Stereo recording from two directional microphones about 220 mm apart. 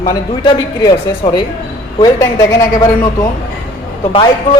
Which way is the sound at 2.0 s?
15° left (ahead or behind).